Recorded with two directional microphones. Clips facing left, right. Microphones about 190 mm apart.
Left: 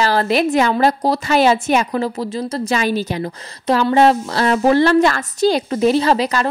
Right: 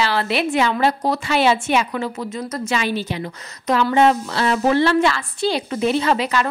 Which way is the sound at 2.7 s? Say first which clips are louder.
Left 3 dB; 40° left (ahead or behind).